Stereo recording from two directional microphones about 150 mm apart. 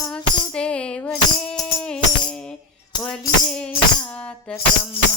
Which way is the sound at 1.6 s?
5° left (ahead or behind).